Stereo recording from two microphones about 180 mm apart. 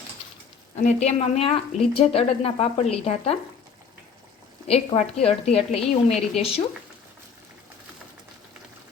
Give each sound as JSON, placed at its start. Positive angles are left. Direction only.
{"t": 0.8, "sound": "a woman's voice", "side_deg": 40}
{"t": 4.7, "sound": "a woman's voice", "side_deg": 35}